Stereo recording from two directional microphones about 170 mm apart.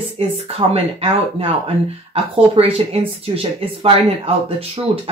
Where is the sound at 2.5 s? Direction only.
35° right (ahead or behind).